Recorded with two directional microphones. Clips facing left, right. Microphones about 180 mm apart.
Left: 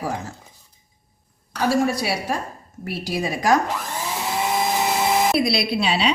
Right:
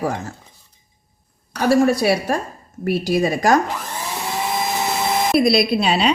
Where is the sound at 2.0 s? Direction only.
55° right (ahead or behind).